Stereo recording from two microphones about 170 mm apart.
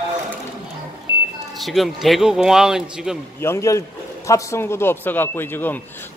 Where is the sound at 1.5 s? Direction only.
Centre (ahead or behind).